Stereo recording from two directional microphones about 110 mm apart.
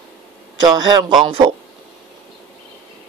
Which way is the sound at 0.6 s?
35° right (ahead or behind).